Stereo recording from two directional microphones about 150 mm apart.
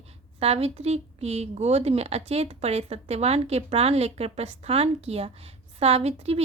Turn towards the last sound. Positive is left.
turn(degrees=-45)  # may be behind; listen again after turning